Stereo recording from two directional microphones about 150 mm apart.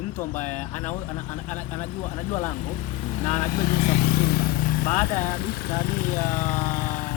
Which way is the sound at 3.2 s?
50° left (ahead or behind).